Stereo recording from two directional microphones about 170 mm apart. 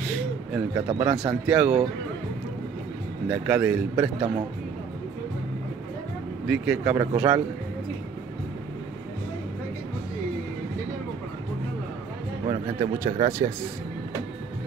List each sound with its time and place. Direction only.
0.7 s a man's voice: 20° right (ahead or behind)
1.1 s speech: 5° right (ahead or behind)
3.3 s speech: 5° right (ahead or behind)
3.9 s a man's voice: 25° right (ahead or behind)
6.4 s speech: 5° right (ahead or behind)
13.0 s speech: 15° right (ahead or behind)